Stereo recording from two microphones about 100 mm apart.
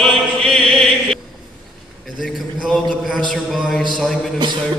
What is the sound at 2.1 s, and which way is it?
A man's voice, centre (ahead or behind).